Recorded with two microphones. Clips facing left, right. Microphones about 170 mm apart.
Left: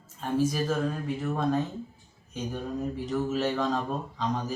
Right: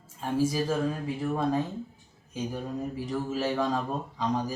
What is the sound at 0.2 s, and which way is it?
Speech, 5° right (ahead or behind).